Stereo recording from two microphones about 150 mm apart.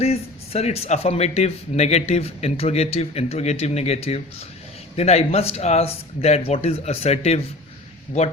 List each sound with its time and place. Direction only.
0.0 s speech: 45° left (ahead or behind)